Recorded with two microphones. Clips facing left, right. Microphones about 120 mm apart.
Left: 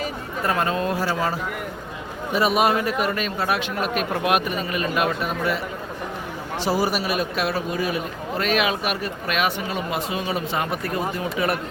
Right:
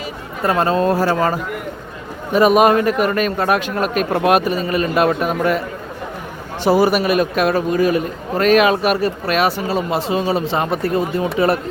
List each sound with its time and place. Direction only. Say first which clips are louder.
0.4 s a man's voice: right 7 dB; 30° right (ahead or behind)
1.1 s a man's voice: right 6 dB; 50° right (ahead or behind)
6.7 s a man's voice: right 9 dB; 60° right (ahead or behind); by 11.6 s 30° right (ahead or behind)